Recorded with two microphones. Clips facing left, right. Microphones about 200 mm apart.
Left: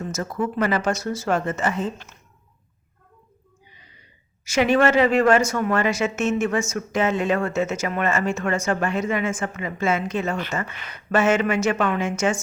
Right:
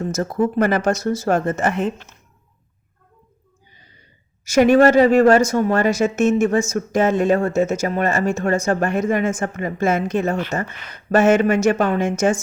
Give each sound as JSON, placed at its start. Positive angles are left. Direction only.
{"t": 0.0, "sound": "speech", "side_deg": -40}
{"t": 4.4, "sound": "a woman's voice", "side_deg": -40}